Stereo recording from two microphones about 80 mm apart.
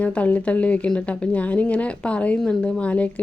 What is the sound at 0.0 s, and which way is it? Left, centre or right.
Speech, centre.